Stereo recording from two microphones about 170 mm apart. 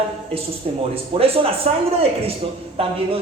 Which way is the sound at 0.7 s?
35° right (ahead or behind).